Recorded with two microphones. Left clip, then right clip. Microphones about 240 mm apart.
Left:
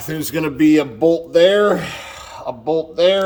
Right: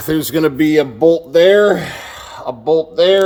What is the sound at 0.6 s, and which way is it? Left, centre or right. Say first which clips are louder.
Mantra: left 3 dB; right.